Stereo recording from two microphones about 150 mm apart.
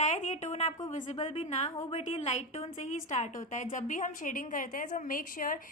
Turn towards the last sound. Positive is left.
turn(degrees=65)  # may be behind; listen again after turning